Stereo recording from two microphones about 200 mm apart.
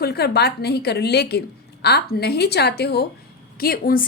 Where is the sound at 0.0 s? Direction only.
55° left (ahead or behind).